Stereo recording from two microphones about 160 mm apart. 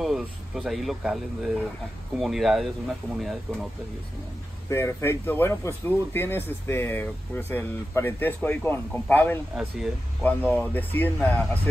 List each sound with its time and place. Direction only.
0.0 s speech: centre (ahead or behind)
4.6 s speech: 15° left (ahead or behind)
9.6 s speech: 5° right (ahead or behind)
10.2 s speech: 10° left (ahead or behind)